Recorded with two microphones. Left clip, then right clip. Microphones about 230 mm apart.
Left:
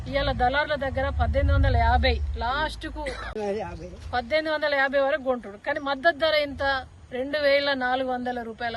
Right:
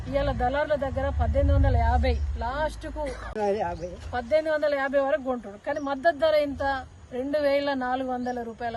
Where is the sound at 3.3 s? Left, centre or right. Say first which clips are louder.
Right 5 dB; right.